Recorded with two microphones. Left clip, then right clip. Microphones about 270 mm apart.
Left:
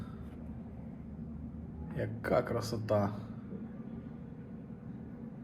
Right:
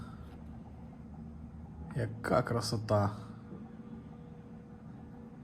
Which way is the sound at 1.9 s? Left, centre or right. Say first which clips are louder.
Even; right.